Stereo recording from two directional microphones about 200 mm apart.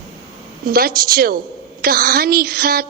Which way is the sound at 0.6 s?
45° right (ahead or behind).